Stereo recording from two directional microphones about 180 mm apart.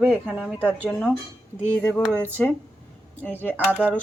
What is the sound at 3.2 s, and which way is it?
Speech, 10° left (ahead or behind).